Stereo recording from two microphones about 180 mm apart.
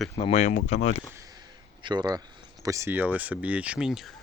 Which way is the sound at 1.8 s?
25° right (ahead or behind).